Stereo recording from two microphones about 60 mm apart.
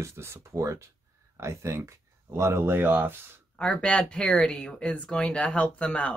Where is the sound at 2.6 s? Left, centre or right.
Right.